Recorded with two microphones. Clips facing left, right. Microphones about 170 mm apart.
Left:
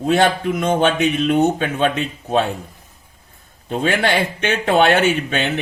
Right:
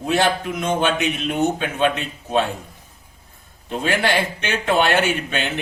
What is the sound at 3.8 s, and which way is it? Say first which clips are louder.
Speech: left 2 dB; 55° left (ahead or behind).